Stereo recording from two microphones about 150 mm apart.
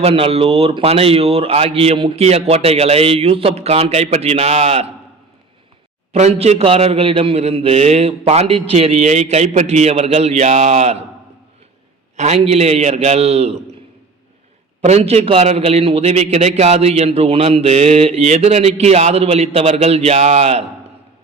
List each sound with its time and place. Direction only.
0.0 s speech: 40° right (ahead or behind)
6.1 s speech: 45° right (ahead or behind)
12.1 s speech: 50° right (ahead or behind)
14.8 s speech: 45° right (ahead or behind)